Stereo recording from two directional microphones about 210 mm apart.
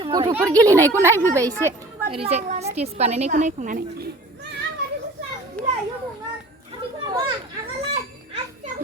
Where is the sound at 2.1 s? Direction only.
30° right (ahead or behind).